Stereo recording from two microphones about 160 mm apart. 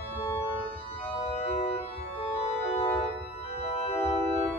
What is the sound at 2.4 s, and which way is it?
Organ, 40° left (ahead or behind).